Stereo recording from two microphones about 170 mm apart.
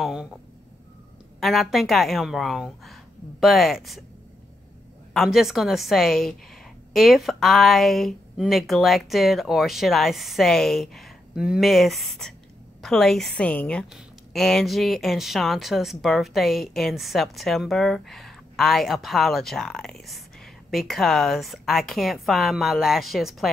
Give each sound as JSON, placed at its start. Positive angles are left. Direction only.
{"t": 0.0, "sound": "a woman's voice", "side_deg": -5}
{"t": 1.4, "sound": "a woman's voice", "side_deg": 0}
{"t": 5.1, "sound": "a woman's voice", "side_deg": 0}